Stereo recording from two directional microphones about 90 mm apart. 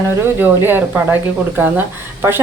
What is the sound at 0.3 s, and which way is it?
Speech, 20° right (ahead or behind).